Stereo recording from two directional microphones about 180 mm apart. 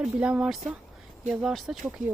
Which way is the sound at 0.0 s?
5° right (ahead or behind).